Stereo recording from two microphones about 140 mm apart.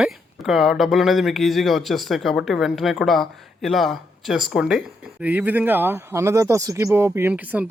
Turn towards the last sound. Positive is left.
turn(degrees=-10)  # may be behind; listen again after turning